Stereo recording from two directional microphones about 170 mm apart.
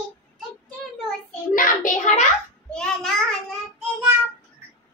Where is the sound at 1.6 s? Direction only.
50° left (ahead or behind).